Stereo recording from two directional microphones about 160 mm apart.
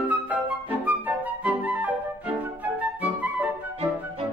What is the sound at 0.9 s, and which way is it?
Music, 10° right (ahead or behind).